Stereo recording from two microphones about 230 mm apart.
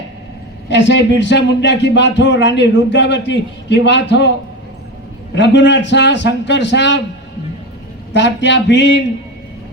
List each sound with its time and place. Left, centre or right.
0.7 s speech: left
5.3 s speech: left
8.1 s speech: left